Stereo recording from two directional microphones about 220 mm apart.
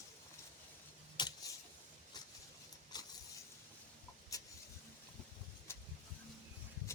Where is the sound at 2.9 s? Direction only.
20° left (ahead or behind).